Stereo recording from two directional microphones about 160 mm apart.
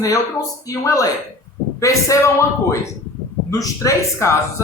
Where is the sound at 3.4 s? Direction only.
20° left (ahead or behind).